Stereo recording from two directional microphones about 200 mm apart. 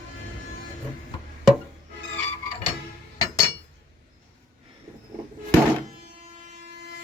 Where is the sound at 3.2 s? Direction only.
15° left (ahead or behind).